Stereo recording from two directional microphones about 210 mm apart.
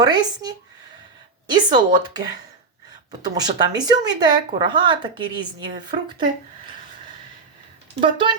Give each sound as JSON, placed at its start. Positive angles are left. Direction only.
{"t": 0.0, "sound": "speech", "side_deg": -20}
{"t": 8.0, "sound": "speech", "side_deg": -25}